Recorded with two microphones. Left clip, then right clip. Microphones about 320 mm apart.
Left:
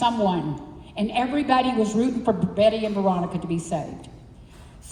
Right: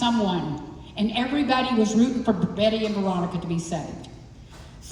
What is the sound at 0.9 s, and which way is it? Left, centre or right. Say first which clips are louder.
A woman's voice: left 1 dB; centre.